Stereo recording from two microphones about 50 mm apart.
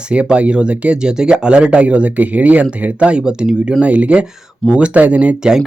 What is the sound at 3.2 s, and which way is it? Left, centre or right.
Speech, centre.